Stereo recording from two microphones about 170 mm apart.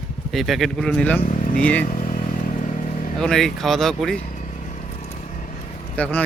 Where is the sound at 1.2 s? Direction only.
45° left (ahead or behind).